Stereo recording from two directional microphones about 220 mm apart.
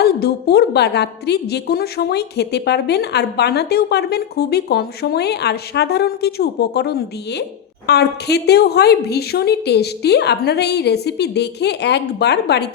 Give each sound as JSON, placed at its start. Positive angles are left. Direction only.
{"t": 0.0, "sound": "a woman's voice", "side_deg": 45}